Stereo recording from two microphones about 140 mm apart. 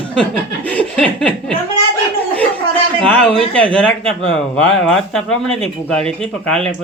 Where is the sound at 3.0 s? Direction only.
10° left (ahead or behind).